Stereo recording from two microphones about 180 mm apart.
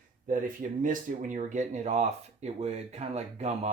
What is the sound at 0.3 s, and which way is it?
Speech, 45° right (ahead or behind).